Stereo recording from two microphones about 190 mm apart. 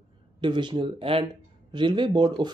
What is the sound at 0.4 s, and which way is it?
Speech, 25° right (ahead or behind).